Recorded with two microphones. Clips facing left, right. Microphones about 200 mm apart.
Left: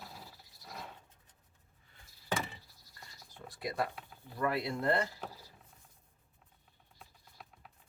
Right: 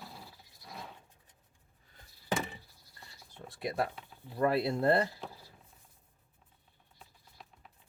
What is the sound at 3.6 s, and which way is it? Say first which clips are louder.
Speech: right 2 dB; 25° right (ahead or behind).